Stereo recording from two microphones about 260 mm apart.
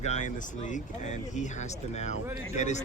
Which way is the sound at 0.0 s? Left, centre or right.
Left.